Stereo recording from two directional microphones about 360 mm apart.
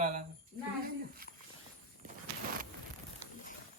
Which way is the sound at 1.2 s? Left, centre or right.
Right.